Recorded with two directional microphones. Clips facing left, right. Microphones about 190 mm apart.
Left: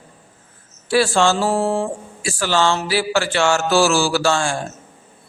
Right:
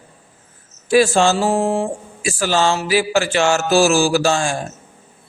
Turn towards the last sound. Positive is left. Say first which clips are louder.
# right 2 dB
turn(degrees=-15)  # may be behind; listen again after turning